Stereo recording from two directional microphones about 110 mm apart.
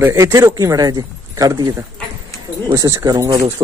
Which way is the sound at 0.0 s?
30° right (ahead or behind).